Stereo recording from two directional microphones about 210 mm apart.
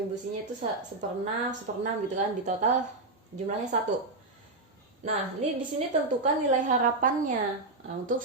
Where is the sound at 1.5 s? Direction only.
35° right (ahead or behind).